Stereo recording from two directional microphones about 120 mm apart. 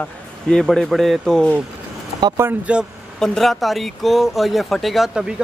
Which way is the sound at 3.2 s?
Centre (ahead or behind).